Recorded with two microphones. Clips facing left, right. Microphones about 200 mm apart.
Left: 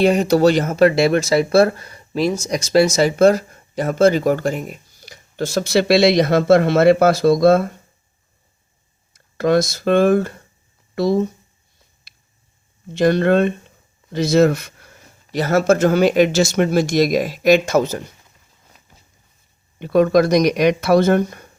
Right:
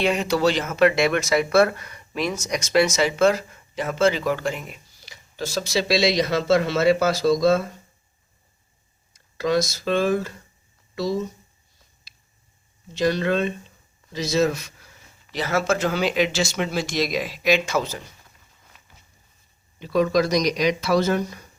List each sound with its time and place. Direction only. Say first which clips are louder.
0.0 s speech: left 7 dB; 40° left (ahead or behind); by 7.8 s 55° left (ahead or behind)
9.1 s speech: left 6 dB; 55° left (ahead or behind)
12.1 s a sound: left 1 dB; 55° left (ahead or behind)
12.9 s speech: left 7 dB; 55° left (ahead or behind)
19.8 s speech: left 6 dB; 55° left (ahead or behind)